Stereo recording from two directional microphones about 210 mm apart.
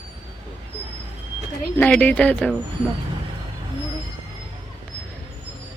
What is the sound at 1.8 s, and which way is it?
Speech, 5° left (ahead or behind).